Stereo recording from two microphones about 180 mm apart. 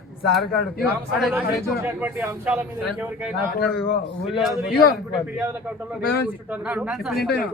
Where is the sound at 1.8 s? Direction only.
15° right (ahead or behind).